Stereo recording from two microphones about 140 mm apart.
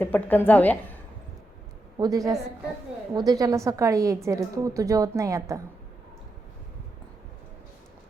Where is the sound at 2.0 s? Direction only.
25° right (ahead or behind).